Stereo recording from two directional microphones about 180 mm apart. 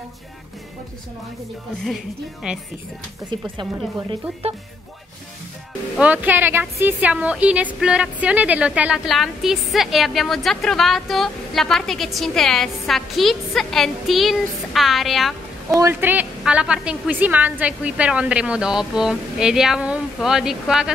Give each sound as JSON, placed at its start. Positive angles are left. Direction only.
{"t": 2.4, "sound": "speech", "side_deg": -5}
{"t": 3.3, "sound": "speech", "side_deg": -25}
{"t": 5.9, "sound": "speech", "side_deg": -10}
{"t": 15.7, "sound": "speech", "side_deg": -15}